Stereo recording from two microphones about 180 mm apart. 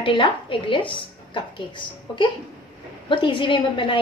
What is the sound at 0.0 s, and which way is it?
A woman's voice, 30° left (ahead or behind).